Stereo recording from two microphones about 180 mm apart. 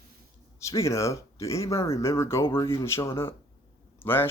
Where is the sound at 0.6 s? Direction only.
15° left (ahead or behind).